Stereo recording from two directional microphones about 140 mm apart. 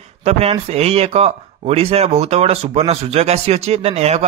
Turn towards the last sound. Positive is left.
turn(degrees=-45)  # may be behind; listen again after turning